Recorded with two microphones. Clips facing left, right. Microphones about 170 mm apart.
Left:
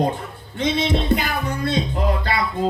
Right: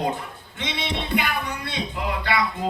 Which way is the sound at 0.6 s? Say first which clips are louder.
Left 8 dB; 40° left (ahead or behind).